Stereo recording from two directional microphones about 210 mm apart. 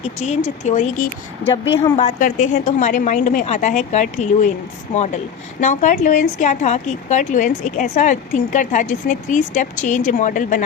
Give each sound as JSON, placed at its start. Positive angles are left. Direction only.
{"t": 0.2, "sound": "speech", "side_deg": 35}